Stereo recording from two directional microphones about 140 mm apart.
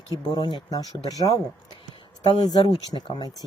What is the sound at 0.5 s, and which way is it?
Speech, 25° left (ahead or behind).